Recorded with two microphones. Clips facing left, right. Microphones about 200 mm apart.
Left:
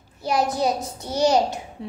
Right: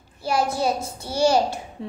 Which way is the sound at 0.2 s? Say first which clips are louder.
Left 1 dB; 20° left (ahead or behind).